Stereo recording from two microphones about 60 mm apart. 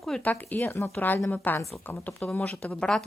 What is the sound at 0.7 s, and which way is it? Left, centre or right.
Speech, left.